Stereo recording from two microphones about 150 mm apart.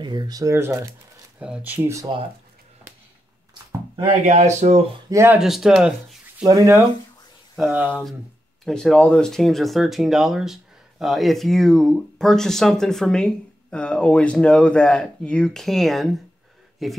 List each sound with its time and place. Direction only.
0.0 s speech: 30° right (ahead or behind)
4.3 s speech: 50° right (ahead or behind)
5.1 s speech: 15° right (ahead or behind)
5.4 s speech: 5° right (ahead or behind)
6.4 s speech: 20° right (ahead or behind)
7.5 s speech: 5° right (ahead or behind)
8.6 s speech: 5° left (ahead or behind)